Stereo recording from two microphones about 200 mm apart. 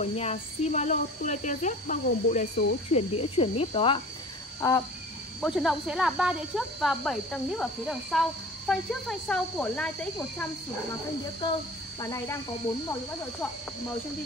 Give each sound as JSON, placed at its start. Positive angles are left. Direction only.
{"t": 0.0, "sound": "speech", "side_deg": 30}
{"t": 2.9, "sound": "cricket", "side_deg": 30}
{"t": 4.6, "sound": "a sound", "side_deg": 15}
{"t": 5.4, "sound": "speech", "side_deg": 0}
{"t": 12.0, "sound": "speech", "side_deg": 15}